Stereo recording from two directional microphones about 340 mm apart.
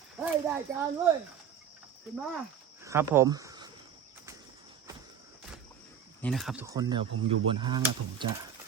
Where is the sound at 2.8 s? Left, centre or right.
Centre.